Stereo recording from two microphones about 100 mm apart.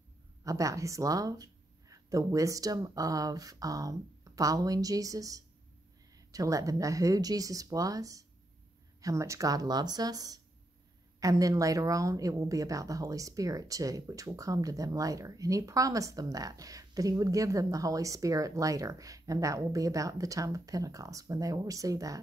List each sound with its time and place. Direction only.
0.4 s a woman's voice: 35° right (ahead or behind)